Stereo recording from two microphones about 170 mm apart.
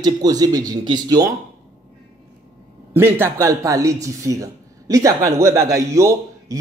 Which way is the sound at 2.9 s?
15° right (ahead or behind).